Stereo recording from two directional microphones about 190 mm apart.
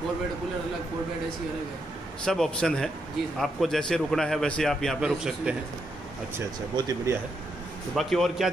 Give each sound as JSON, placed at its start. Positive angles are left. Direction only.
{"t": 2.2, "sound": "a man's voice", "side_deg": 5}
{"t": 6.3, "sound": "speech", "side_deg": -15}
{"t": 7.9, "sound": "a man's voice", "side_deg": 0}